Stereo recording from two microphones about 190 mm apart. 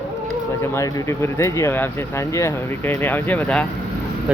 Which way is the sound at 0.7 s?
15° left (ahead or behind).